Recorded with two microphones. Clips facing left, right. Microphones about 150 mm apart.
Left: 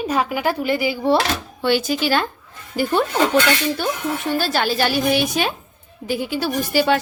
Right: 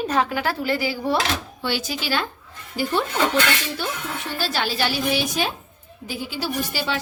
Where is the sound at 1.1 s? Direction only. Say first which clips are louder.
Left 4 dB; 60° left (ahead or behind).